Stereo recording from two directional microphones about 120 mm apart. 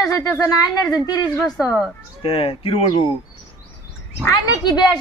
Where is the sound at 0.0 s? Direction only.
25° left (ahead or behind).